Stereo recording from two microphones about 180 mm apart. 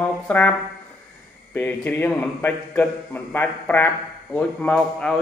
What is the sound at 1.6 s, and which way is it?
Mantra, 10° left (ahead or behind).